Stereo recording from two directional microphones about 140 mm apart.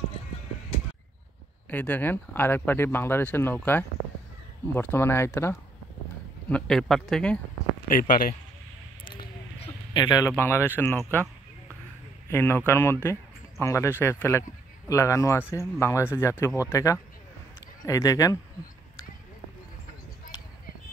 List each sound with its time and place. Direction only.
1.7 s speech: 10° left (ahead or behind)
6.5 s speech: 5° left (ahead or behind)
7.9 s speech: 90° left
9.9 s speech: 30° left (ahead or behind)
10.3 s speech: 15° left (ahead or behind)
12.3 s speech: 15° left (ahead or behind)